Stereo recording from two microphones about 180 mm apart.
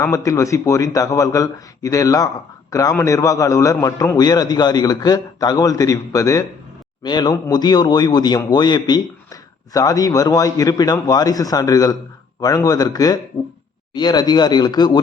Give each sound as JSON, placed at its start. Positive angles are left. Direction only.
{"t": 0.0, "sound": "a man's voice", "side_deg": 15}